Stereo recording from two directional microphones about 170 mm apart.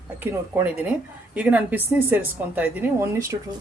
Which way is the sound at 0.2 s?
15° right (ahead or behind).